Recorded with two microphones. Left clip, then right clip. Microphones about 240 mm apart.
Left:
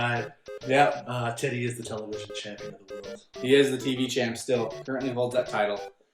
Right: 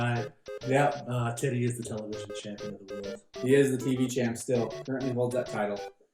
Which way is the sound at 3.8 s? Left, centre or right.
Centre.